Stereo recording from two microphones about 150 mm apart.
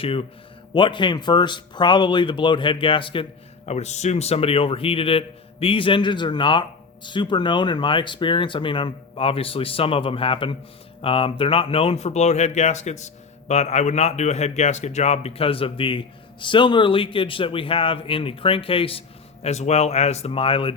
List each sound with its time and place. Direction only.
0.0 s a man's voice: 40° left (ahead or behind)
3.7 s a man's voice: 50° left (ahead or behind)